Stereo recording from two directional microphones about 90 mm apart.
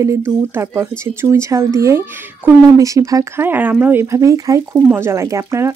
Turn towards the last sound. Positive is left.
turn(degrees=-30)  # may be behind; listen again after turning